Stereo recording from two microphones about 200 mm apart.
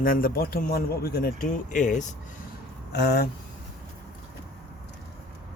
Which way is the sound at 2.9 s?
55° left (ahead or behind).